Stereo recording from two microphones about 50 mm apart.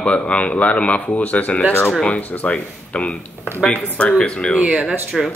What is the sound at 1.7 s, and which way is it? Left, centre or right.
Speech, left.